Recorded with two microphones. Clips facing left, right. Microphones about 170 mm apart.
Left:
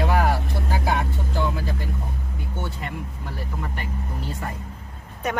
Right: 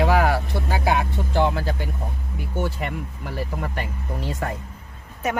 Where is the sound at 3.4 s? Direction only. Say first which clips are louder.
Right 5 dB; 75° right (ahead or behind).